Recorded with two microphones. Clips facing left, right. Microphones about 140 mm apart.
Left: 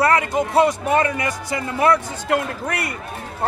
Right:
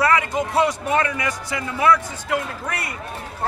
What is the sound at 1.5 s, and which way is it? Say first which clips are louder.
Speech: left 1 dB; 45° left (ahead or behind).